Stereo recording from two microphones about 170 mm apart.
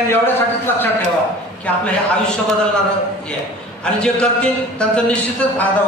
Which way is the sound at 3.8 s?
5° left (ahead or behind).